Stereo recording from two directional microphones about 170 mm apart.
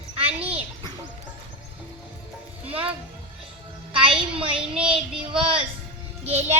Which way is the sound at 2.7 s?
35° right (ahead or behind).